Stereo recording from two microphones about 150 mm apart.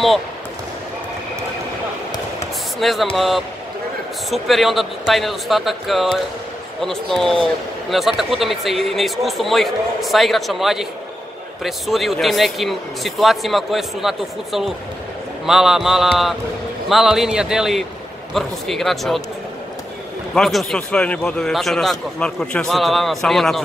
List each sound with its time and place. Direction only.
2.8 s a man's voice: centre (ahead or behind)
20.3 s a man's voice: 5° left (ahead or behind)